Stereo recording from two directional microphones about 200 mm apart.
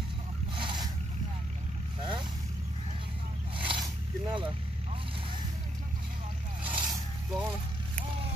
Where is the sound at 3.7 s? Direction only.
25° right (ahead or behind).